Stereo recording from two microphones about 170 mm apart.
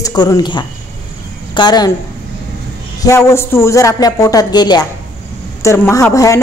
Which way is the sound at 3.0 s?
15° left (ahead or behind).